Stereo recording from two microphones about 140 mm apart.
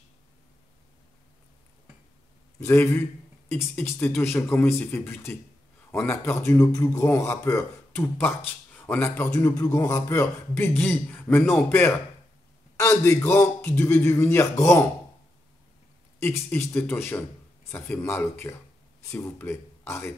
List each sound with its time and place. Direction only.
2.6 s a man's voice: 15° left (ahead or behind)
12.7 s a man's voice: 20° left (ahead or behind)
16.2 s a man's voice: 15° left (ahead or behind)